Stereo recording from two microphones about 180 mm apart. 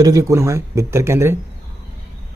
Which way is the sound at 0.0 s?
20° right (ahead or behind).